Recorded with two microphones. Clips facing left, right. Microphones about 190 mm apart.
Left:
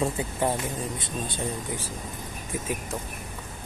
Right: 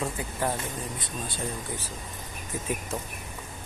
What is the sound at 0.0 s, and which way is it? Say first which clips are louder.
Speech: left 4 dB; 20° left (ahead or behind).